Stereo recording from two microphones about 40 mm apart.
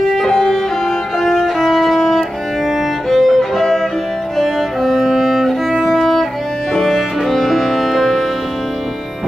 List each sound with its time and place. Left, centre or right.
0.3 s violin: centre
3.3 s violin: centre
4.4 s music: centre